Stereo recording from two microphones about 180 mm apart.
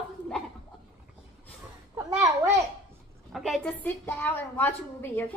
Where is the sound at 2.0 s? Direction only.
20° right (ahead or behind).